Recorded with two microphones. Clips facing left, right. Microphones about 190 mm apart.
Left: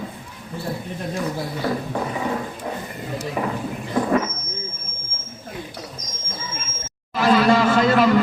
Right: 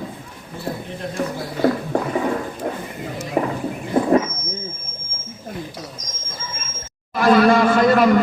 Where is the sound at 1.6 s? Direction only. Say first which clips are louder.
Right 7 dB; 55° right (ahead or behind).